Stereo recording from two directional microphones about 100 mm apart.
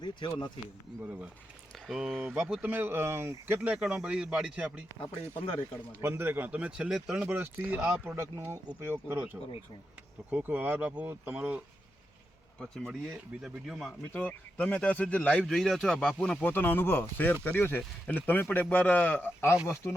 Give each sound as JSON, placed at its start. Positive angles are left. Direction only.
{"t": 0.0, "sound": "speech", "side_deg": 50}
{"t": 1.0, "sound": "speech", "side_deg": -10}
{"t": 6.0, "sound": "speech", "side_deg": -25}
{"t": 7.3, "sound": "speech", "side_deg": -20}
{"t": 12.5, "sound": "speech", "side_deg": 5}
{"t": 14.1, "sound": "speech", "side_deg": 15}
{"t": 16.4, "sound": "speech", "side_deg": 20}